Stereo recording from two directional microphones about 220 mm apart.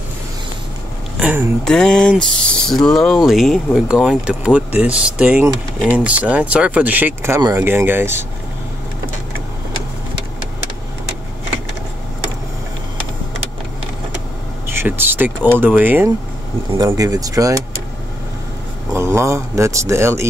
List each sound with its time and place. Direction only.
1.2 s speech: 10° right (ahead or behind)
1.6 s speech: 5° left (ahead or behind)
14.7 s speech: 10° right (ahead or behind)
18.9 s speech: 10° right (ahead or behind)